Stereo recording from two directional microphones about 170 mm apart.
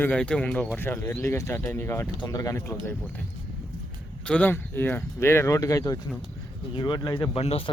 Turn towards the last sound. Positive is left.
turn(degrees=35)  # may be behind; listen again after turning